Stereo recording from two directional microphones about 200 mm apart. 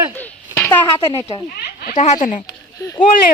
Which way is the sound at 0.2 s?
10° left (ahead or behind).